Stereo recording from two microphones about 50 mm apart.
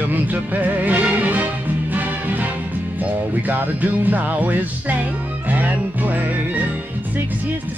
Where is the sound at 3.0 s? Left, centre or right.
Right.